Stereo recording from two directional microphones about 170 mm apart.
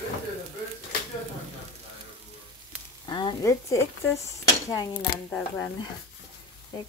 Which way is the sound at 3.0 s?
25° left (ahead or behind).